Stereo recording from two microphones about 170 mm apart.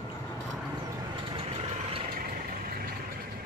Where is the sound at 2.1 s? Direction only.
55° right (ahead or behind).